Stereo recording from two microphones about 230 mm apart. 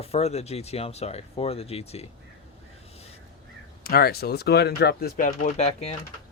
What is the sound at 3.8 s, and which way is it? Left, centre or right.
Speech, left.